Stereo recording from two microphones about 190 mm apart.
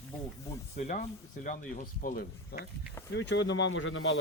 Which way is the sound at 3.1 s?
70° left (ahead or behind).